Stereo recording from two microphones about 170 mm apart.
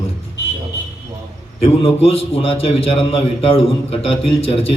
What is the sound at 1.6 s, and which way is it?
A man's voice, 35° left (ahead or behind).